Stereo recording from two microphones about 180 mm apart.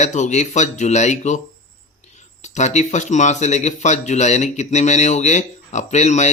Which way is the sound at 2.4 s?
40° left (ahead or behind).